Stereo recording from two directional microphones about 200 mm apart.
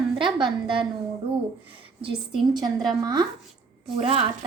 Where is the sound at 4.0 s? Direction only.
30° right (ahead or behind).